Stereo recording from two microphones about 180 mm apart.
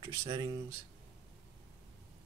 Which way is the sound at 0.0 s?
20° right (ahead or behind).